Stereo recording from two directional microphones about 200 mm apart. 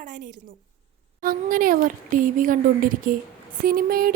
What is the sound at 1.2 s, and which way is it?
A woman's voice, 45° right (ahead or behind).